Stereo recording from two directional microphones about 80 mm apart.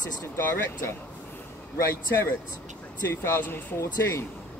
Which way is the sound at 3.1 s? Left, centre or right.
Left.